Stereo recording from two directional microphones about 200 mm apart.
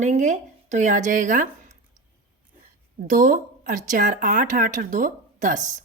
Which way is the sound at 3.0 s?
40° right (ahead or behind).